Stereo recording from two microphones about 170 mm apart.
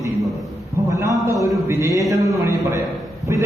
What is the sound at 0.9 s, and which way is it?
A man's voice, 20° right (ahead or behind).